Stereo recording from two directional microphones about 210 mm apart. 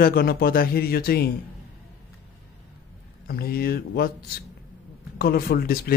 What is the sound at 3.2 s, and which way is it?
A man's voice, 45° left (ahead or behind).